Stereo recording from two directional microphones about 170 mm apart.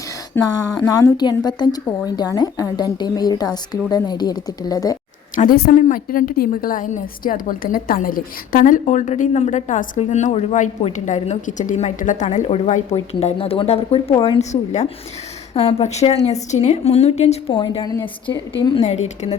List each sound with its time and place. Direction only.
0.3 s a woman's voice: 20° left (ahead or behind)
5.3 s a woman's voice: 55° left (ahead or behind)